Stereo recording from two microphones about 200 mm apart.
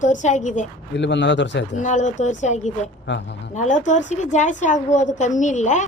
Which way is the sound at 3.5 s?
35° left (ahead or behind).